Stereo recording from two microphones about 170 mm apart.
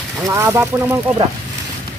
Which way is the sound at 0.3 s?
15° right (ahead or behind).